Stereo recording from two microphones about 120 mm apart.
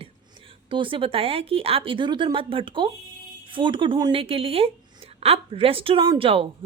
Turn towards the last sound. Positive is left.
turn(degrees=-50)  # may be behind; listen again after turning